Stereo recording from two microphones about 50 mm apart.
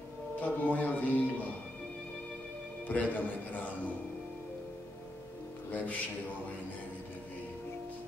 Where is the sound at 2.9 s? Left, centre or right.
Left.